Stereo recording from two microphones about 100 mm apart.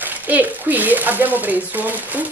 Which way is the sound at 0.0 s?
15° right (ahead or behind).